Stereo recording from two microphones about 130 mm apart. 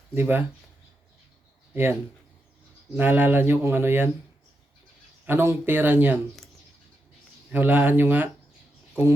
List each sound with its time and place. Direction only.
0.1 s speech: 15° right (ahead or behind)
1.7 s speech: 15° right (ahead or behind)
5.2 s speech: 20° right (ahead or behind)
7.5 s speech: 15° right (ahead or behind)